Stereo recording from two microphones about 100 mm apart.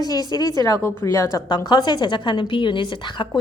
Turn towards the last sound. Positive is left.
turn(degrees=50)  # may be behind; listen again after turning